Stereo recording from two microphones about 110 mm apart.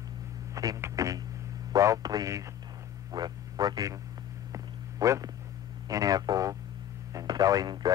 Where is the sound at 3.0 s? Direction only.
40° right (ahead or behind).